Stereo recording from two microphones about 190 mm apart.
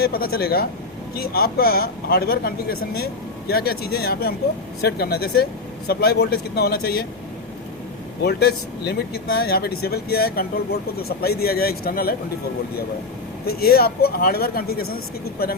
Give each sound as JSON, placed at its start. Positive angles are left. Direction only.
{"t": 0.0, "sound": "speech", "side_deg": 55}
{"t": 8.2, "sound": "speech", "side_deg": 55}
{"t": 13.4, "sound": "speech", "side_deg": 55}